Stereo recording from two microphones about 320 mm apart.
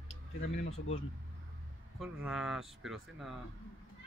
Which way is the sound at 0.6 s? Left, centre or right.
Left.